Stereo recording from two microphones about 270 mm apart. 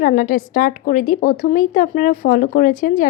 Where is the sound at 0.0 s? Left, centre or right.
Left.